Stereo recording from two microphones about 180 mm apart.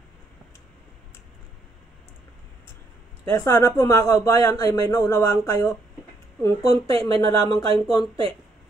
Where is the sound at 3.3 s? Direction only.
15° left (ahead or behind).